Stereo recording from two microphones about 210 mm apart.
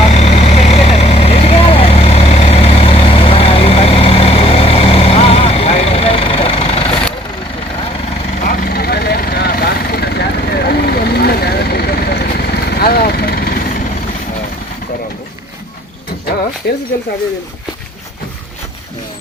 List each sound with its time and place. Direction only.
0.0 s vehicle: 30° left (ahead or behind)
8.4 s vehicle: 45° left (ahead or behind)
16.7 s a sound: 50° left (ahead or behind)